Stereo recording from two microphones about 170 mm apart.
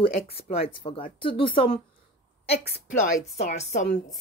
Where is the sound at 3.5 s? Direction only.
45° left (ahead or behind).